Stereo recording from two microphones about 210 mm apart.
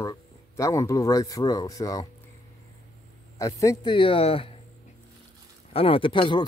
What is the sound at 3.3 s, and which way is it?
Speech, 15° left (ahead or behind).